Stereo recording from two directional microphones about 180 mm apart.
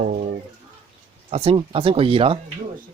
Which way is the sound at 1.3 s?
30° right (ahead or behind).